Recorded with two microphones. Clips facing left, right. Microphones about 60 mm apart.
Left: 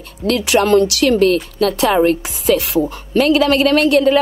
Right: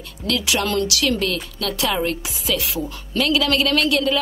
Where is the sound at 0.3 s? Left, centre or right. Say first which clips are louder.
Left 9 dB; left.